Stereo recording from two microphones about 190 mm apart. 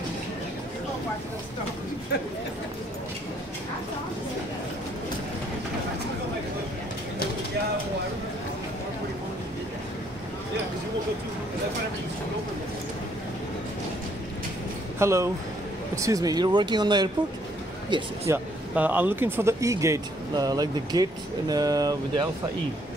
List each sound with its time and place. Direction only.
15.0 s speech: 15° right (ahead or behind)
18.3 s speech: 10° right (ahead or behind)